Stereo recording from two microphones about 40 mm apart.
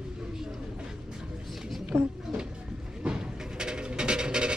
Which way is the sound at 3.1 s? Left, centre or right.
Centre.